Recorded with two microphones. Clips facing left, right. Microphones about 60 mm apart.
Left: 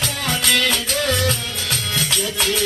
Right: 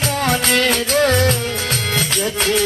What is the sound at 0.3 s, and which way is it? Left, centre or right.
Music, right.